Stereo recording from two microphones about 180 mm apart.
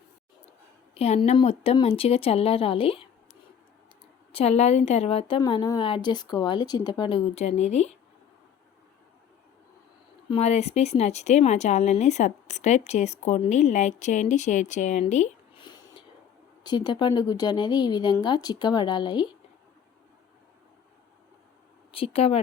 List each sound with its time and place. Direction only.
0.9 s speech: 35° left (ahead or behind)
4.3 s speech: 35° left (ahead or behind)
10.2 s speech: 35° left (ahead or behind)
15.5 s a sound: 25° left (ahead or behind)
16.6 s speech: 25° left (ahead or behind)
21.9 s speech: 35° left (ahead or behind)